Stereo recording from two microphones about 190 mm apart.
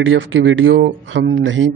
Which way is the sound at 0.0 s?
85° right.